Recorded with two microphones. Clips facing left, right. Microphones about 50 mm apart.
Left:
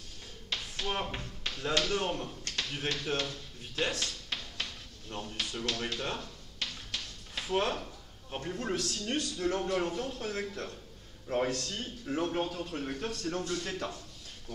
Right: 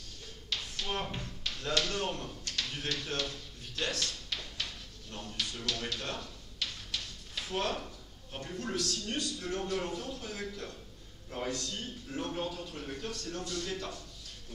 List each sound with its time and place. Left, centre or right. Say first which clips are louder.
0.5 s tap: left 1 dB; left
0.8 s speech: left 2 dB; centre
1.4 s tap: left 3 dB; left
1.8 s speech: left 2 dB; centre
3.7 s drawer open or close: left 2 dB; left
5.1 s a sound: left 2 dB; left
8.3 s a man's voice: left 3 dB; left
9.6 s a man's voice: left 3 dB; left